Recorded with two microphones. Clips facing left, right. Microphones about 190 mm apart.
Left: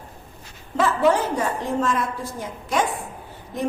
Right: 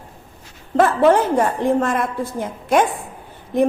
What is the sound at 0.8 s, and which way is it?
A woman's voice, 55° right (ahead or behind).